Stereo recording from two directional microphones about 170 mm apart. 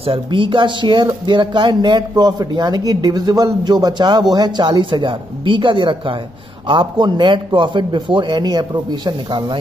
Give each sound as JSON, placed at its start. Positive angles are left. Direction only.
{"t": 0.0, "sound": "speech", "side_deg": -30}